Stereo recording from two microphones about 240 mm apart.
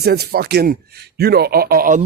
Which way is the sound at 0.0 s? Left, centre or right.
Right.